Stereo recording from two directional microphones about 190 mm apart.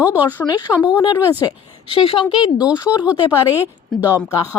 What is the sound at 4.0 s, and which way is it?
Speech, 10° right (ahead or behind).